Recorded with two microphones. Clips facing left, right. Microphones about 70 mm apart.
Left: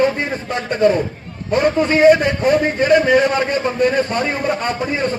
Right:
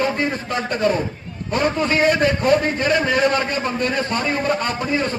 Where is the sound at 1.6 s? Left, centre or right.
Centre.